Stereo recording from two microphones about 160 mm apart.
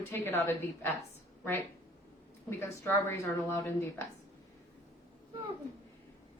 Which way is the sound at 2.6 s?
15° left (ahead or behind).